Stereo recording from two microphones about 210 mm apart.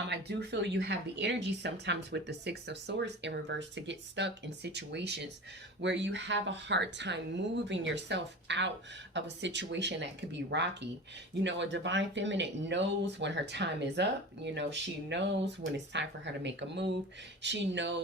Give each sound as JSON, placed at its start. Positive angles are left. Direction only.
{"t": 0.1, "sound": "speech", "side_deg": -55}